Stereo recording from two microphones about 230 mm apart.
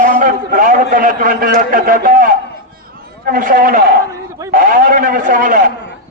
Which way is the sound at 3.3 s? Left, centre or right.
Right.